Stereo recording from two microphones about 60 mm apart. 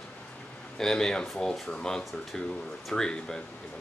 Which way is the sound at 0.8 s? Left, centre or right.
Centre.